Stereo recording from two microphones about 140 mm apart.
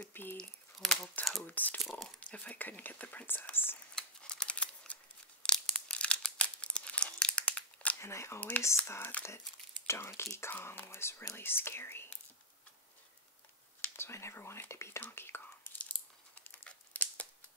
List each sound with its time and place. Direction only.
0.0 s a sound: 15° left (ahead or behind)
0.7 s crumpling: centre (ahead or behind)
1.5 s a sound: 10° left (ahead or behind)
1.8 s a sound: centre (ahead or behind)
2.1 s whispering: 10° left (ahead or behind)
3.9 s scissors: 5° left (ahead or behind)
5.4 s crumpling: 5° left (ahead or behind)
9.8 s speech: 20° left (ahead or behind)
13.7 s whispering: 15° left (ahead or behind)
16.4 s crumpling: 15° left (ahead or behind)